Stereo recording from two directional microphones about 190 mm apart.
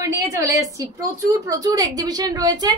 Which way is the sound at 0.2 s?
15° right (ahead or behind).